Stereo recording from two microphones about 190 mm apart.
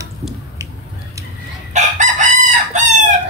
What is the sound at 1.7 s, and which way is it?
Chicken, 40° right (ahead or behind).